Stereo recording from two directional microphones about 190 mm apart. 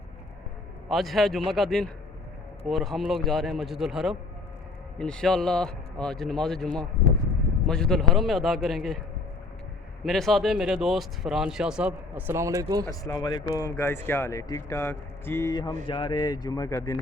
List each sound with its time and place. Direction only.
0.9 s speech: centre (ahead or behind); by 12.8 s 15° right (ahead or behind)
12.9 s speech: 20° left (ahead or behind)